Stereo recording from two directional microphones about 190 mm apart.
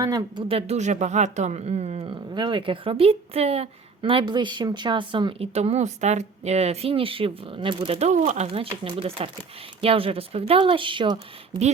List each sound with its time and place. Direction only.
0.0 s speech: 20° right (ahead or behind)